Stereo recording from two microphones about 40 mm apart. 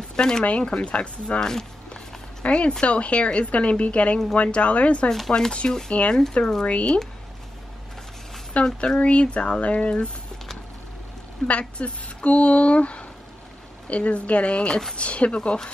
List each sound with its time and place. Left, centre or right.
0.1 s speech: centre
0.5 s speech: left
5.3 s speech: left
8.5 s speech: left
11.4 s speech: left